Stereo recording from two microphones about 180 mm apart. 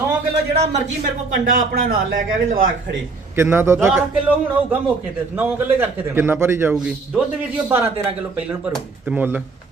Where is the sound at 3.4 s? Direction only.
15° right (ahead or behind).